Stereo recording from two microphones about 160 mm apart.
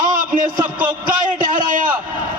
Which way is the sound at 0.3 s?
55° right (ahead or behind).